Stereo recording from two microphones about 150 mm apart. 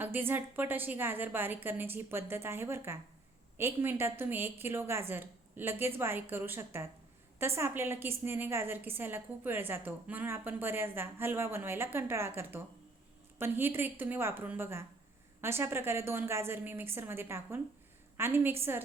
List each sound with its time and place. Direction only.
0.0 s a woman's voice: 15° right (ahead or behind)